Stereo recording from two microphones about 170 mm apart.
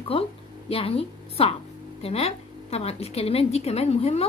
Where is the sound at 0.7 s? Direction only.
35° left (ahead or behind).